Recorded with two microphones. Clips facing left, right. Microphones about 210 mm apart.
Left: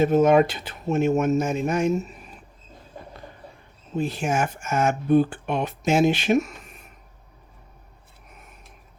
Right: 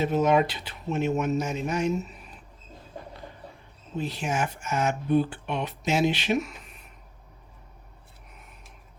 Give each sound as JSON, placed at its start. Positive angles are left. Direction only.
{"t": 0.0, "sound": "speech", "side_deg": 50}
{"t": 3.9, "sound": "speech", "side_deg": 50}
{"t": 8.3, "sound": "a sound", "side_deg": 45}